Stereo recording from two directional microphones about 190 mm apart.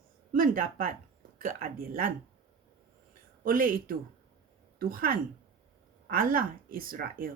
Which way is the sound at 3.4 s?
50° right (ahead or behind).